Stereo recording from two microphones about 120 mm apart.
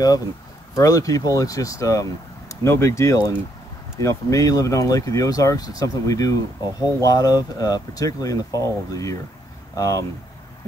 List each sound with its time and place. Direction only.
0.7 s speech: 30° left (ahead or behind)